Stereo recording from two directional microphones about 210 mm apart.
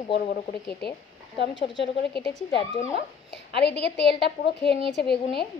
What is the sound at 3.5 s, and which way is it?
A woman's voice, 50° left (ahead or behind).